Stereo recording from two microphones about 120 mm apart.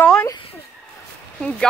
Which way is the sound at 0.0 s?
10° left (ahead or behind).